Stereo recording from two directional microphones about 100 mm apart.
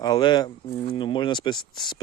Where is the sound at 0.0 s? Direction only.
45° left (ahead or behind).